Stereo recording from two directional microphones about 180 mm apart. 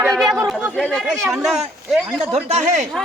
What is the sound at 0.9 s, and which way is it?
A woman's voice, centre (ahead or behind).